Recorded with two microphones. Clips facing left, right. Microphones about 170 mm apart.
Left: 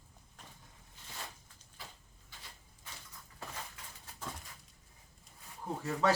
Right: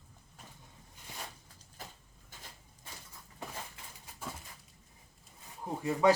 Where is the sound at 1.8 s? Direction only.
45° right (ahead or behind).